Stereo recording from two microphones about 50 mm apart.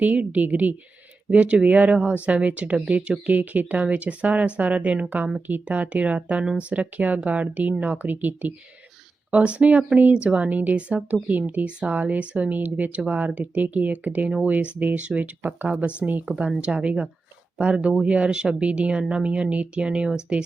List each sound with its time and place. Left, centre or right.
0.0 s speech: right
3.2 s speech: right
16.2 s speech: centre